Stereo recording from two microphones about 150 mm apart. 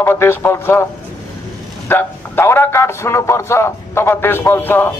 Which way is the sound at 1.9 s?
15° left (ahead or behind).